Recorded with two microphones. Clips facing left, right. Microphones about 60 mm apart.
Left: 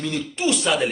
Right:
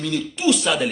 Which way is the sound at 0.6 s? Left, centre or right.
Centre.